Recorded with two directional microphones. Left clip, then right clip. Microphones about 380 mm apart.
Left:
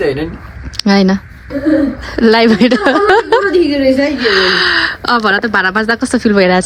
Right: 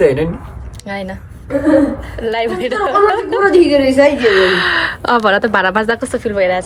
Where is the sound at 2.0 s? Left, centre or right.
Centre.